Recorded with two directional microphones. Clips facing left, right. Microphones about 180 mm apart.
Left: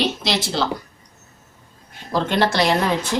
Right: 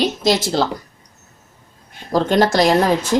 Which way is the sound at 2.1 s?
40° right (ahead or behind).